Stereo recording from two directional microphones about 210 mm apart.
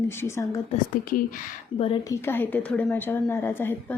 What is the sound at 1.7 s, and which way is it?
Speech, 25° left (ahead or behind).